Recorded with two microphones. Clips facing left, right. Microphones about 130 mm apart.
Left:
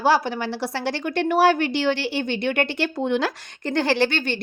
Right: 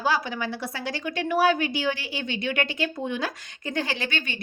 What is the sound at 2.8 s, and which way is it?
A woman's voice, 75° left (ahead or behind).